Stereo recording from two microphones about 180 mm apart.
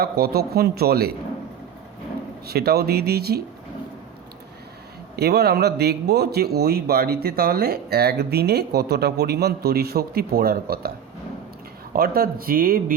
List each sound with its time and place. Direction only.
0.0 s a man's voice: 60° right (ahead or behind)
2.5 s a man's voice: 60° right (ahead or behind)
5.1 s a man's voice: 65° right (ahead or behind)
11.9 s speech: 55° right (ahead or behind)